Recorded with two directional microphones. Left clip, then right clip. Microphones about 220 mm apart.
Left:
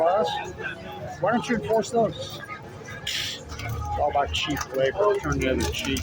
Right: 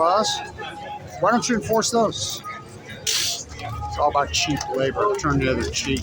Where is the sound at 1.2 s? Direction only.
25° right (ahead or behind).